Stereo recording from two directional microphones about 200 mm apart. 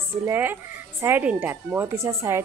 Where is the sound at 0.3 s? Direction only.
10° right (ahead or behind).